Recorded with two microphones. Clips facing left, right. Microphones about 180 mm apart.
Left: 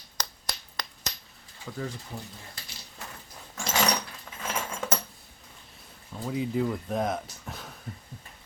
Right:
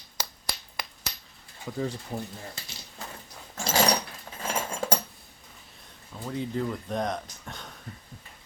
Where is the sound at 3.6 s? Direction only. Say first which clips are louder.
Right 3 dB; 35° right (ahead or behind).